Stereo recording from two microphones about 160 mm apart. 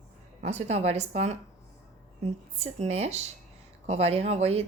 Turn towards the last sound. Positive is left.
turn(degrees=-40)  # may be behind; listen again after turning